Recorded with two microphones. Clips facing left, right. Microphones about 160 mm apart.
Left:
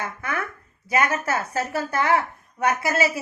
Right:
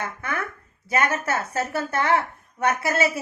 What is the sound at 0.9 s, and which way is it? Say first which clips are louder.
Speech: left 1 dB; 25° right (ahead or behind).